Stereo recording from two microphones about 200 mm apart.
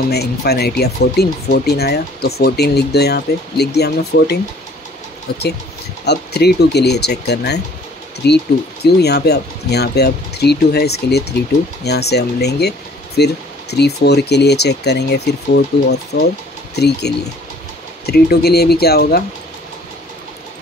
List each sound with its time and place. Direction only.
0.1 s speech: 55° left (ahead or behind)
6.0 s speech: 55° left (ahead or behind)